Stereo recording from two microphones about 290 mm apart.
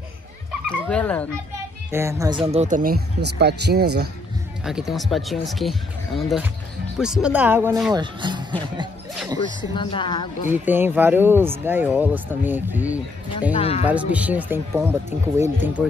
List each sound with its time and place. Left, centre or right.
0.7 s speech: centre
1.9 s speech: centre; by 4.1 s right
4.6 s speech: centre
7.9 s speech: centre
9.6 s a woman's voice: centre
10.5 s speech: centre
13.4 s speech: left
13.8 s speech: centre